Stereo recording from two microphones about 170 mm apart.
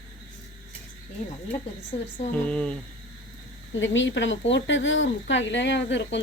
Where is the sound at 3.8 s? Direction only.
90° left.